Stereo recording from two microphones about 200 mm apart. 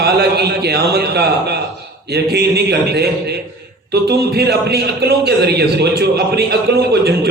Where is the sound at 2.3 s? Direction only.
55° right (ahead or behind).